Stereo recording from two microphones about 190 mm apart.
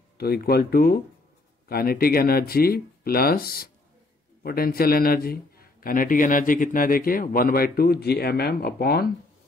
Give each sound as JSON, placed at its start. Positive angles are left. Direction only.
{"t": 0.2, "sound": "a man's voice", "side_deg": 55}